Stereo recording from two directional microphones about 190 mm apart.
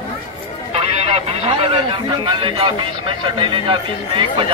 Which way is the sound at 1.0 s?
30° right (ahead or behind).